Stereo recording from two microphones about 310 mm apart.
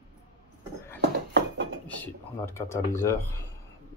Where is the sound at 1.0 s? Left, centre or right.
Right.